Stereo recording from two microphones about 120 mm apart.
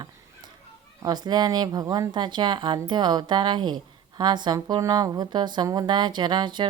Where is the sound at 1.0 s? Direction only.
35° right (ahead or behind).